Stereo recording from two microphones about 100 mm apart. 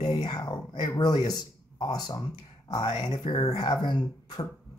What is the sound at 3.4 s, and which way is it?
Speech, 40° left (ahead or behind).